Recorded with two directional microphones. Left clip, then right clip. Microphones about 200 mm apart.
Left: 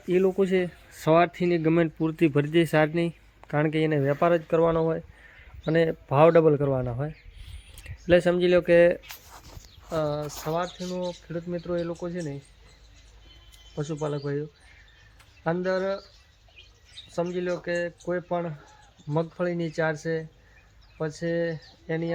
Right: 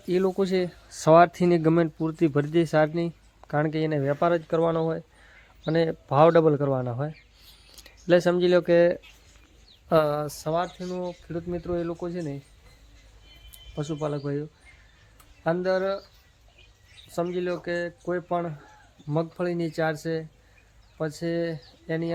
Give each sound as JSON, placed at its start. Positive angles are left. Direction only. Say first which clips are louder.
{"t": 0.1, "sound": "speech", "louder": "left 1 dB", "side_deg": 0}
{"t": 1.7, "sound": "speech", "louder": "even", "side_deg": 0}
{"t": 9.9, "sound": "speech", "louder": "right 6 dB", "side_deg": -55}
{"t": 10.2, "sound": "speech", "louder": "right 2 dB", "side_deg": -35}
{"t": 10.5, "sound": "speech", "louder": "right 1 dB", "side_deg": -15}
{"t": 13.7, "sound": "speech", "louder": "even", "side_deg": -15}
{"t": 15.4, "sound": "speech", "louder": "right 2 dB", "side_deg": -15}
{"t": 17.3, "sound": "speech", "louder": "even", "side_deg": -15}